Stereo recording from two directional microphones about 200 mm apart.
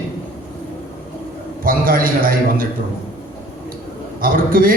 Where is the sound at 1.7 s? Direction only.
45° right (ahead or behind).